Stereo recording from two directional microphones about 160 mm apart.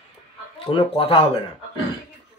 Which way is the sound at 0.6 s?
35° left (ahead or behind).